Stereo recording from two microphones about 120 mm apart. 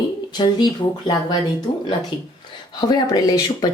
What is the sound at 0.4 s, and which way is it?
Speech, 45° left (ahead or behind).